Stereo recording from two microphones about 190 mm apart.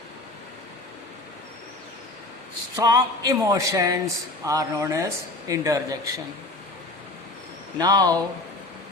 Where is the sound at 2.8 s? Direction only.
20° right (ahead or behind).